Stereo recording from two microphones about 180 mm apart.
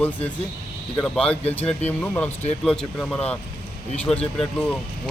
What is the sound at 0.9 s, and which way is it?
A man's voice, 5° left (ahead or behind).